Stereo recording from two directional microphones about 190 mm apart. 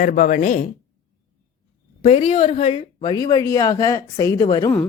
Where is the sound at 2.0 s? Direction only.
35° left (ahead or behind).